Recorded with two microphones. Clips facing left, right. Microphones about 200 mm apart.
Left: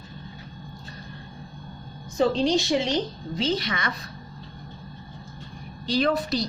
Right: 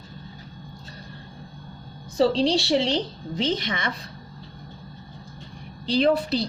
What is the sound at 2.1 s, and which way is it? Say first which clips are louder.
A woman's voice: right 1 dB; 35° right (ahead or behind).